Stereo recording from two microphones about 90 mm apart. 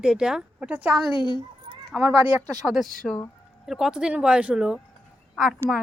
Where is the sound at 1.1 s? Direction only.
55° left (ahead or behind).